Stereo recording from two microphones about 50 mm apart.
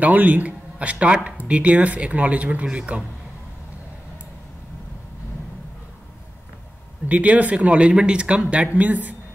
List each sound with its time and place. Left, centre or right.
0.0 s speech: right
7.1 s speech: right
8.7 s a woman's voice: right